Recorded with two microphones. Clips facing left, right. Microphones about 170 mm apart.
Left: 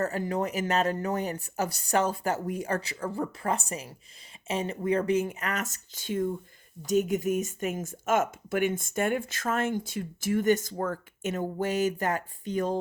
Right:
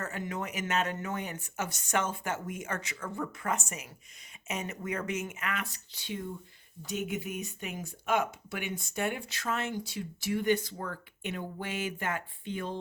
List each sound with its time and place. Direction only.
0.0 s speech: 35° left (ahead or behind)